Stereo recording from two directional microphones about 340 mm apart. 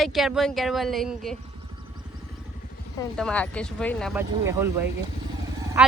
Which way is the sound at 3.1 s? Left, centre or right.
Centre.